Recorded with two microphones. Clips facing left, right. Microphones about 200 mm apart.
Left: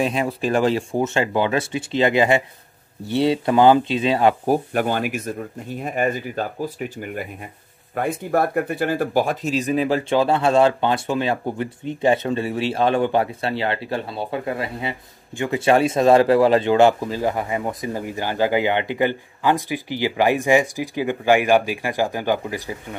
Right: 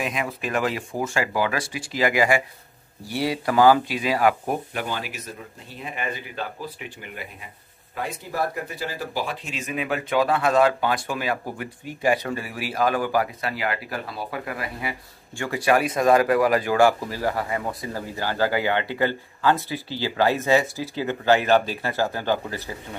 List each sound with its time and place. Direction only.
0.0 s speech: 30° left (ahead or behind)
4.7 s speech: 50° left (ahead or behind); by 22.9 s 15° left (ahead or behind)